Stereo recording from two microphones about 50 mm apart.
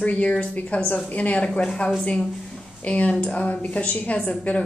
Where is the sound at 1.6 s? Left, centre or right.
Centre.